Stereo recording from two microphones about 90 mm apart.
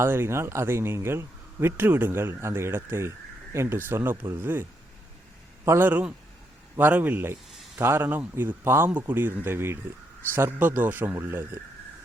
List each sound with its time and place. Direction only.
0.0 s speech: 25° right (ahead or behind)
5.6 s speech: 30° right (ahead or behind)
5.9 s a man's voice: 15° right (ahead or behind)